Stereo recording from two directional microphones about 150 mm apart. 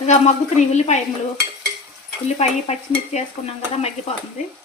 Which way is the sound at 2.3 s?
45° left (ahead or behind).